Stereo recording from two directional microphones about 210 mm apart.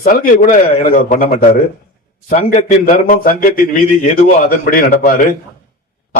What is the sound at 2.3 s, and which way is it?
A man's voice, 35° left (ahead or behind).